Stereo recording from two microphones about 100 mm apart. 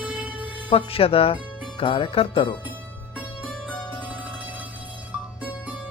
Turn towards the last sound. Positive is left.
turn(degrees=15)  # may be behind; listen again after turning